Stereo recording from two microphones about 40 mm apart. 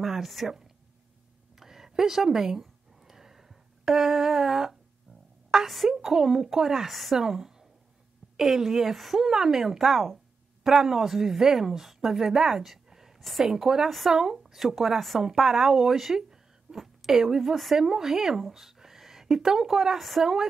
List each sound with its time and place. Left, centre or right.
0.0 s speech: centre
1.5 s a sound: centre
5.5 s speech: centre
6.9 s speech: centre
7.2 s a woman's voice: centre
9.2 s speech: centre
13.8 s speech: centre
14.1 s speech: centre
14.8 s a woman's voice: centre